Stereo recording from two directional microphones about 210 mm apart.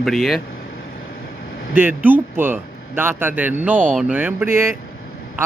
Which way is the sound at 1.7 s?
10° right (ahead or behind).